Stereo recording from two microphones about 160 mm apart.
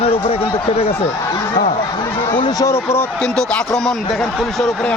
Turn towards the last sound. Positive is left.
turn(degrees=5)  # may be behind; listen again after turning